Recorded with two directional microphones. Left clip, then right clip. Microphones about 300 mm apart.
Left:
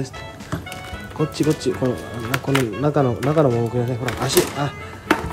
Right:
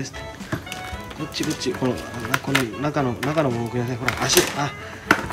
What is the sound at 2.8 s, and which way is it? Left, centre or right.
Speech, centre.